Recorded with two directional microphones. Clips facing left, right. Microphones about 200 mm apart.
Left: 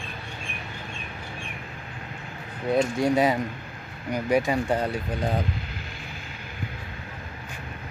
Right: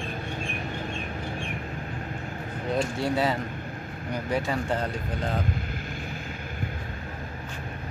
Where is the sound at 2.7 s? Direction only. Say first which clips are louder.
Left 5 dB; 15° left (ahead or behind).